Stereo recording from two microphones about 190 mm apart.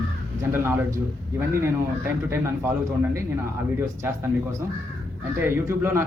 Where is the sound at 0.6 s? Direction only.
10° right (ahead or behind).